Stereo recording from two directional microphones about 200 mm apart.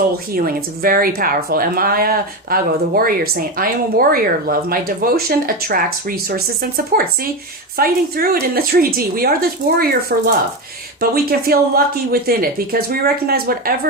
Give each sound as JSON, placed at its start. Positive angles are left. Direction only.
{"t": 0.3, "sound": "speech", "side_deg": -45}